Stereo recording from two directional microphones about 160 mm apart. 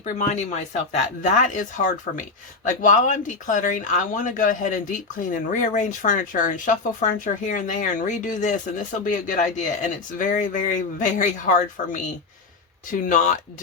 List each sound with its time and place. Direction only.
0.0 s speech: 45° left (ahead or behind)